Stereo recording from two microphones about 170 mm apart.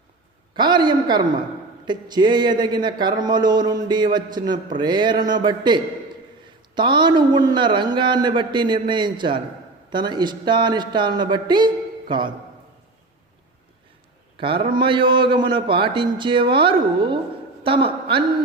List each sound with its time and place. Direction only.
0.5 s a sound: 25° right (ahead or behind)
1.8 s speech: 25° right (ahead or behind)
14.3 s a woman's voice: 30° right (ahead or behind)